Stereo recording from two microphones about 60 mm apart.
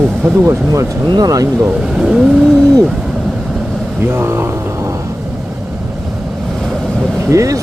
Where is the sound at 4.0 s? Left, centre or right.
Right.